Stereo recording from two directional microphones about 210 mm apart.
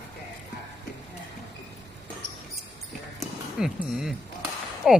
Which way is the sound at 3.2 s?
Centre (ahead or behind).